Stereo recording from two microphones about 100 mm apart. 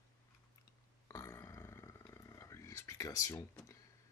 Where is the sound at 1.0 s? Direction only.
25° left (ahead or behind).